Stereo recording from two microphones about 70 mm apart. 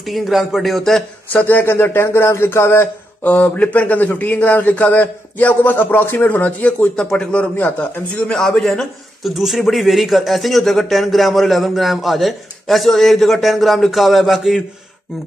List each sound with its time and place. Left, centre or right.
0.0 s a man's voice: centre
1.3 s speech: left
3.3 s a man's voice: left
7.0 s speech: centre
7.5 s a man's voice: left
8.3 s a man's voice: centre